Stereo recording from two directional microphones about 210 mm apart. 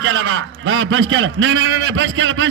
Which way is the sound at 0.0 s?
70° right (ahead or behind).